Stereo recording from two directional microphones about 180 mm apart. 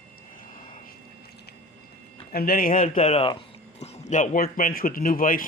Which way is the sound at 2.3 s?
55° left (ahead or behind).